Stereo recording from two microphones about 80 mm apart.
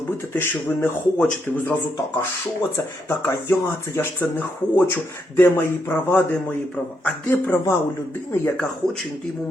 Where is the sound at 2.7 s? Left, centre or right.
Left; by 6.9 s centre.